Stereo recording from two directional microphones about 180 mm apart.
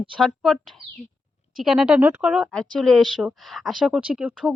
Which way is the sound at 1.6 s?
Centre (ahead or behind).